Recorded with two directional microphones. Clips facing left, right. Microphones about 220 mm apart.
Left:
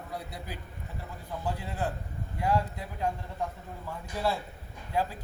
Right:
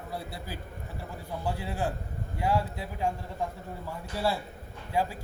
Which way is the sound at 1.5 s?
10° right (ahead or behind).